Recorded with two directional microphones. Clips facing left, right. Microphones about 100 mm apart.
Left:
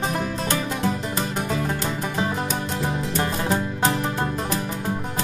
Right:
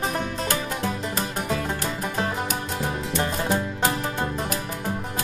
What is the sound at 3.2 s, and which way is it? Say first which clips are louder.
Music: even; 35° left (ahead or behind).